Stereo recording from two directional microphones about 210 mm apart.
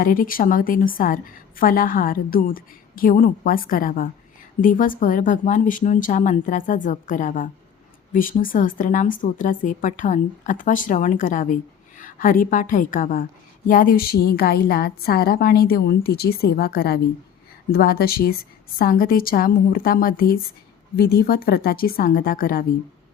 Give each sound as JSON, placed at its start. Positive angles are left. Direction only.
{"t": 0.0, "sound": "a woman's voice", "side_deg": 40}